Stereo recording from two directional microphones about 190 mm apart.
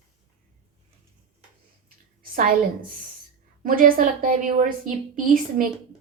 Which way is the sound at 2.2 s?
50° right (ahead or behind).